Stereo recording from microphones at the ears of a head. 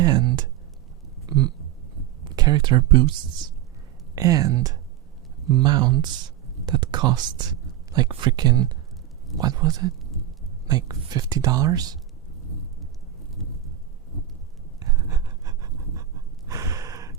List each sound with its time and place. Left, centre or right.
0.0 s speech: right
2.3 s speech: right
16.5 s gasp: right